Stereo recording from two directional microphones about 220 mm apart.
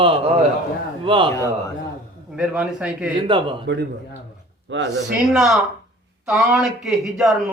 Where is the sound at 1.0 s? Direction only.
20° right (ahead or behind).